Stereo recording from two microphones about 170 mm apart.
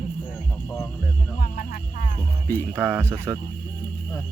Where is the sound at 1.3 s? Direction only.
60° left (ahead or behind).